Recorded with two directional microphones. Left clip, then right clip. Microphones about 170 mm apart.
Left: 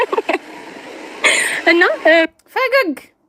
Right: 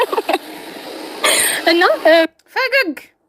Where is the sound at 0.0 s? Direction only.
Centre (ahead or behind).